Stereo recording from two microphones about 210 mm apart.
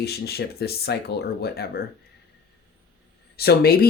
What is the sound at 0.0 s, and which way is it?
Speech, 50° left (ahead or behind).